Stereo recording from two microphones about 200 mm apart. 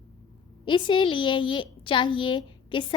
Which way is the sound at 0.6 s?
25° left (ahead or behind).